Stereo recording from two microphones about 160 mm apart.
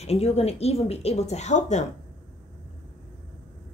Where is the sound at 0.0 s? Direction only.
40° left (ahead or behind).